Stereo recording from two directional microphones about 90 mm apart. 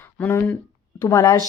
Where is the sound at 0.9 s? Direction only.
40° left (ahead or behind).